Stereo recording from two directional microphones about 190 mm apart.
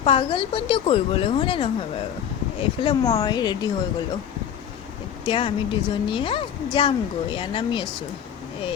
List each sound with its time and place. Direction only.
0.0 s a woman's voice: 30° left (ahead or behind)
5.2 s a woman's voice: 30° left (ahead or behind)